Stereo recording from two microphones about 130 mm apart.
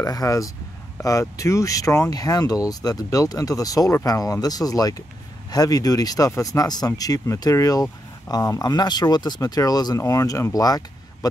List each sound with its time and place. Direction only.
0.0 s speech: 25° left (ahead or behind)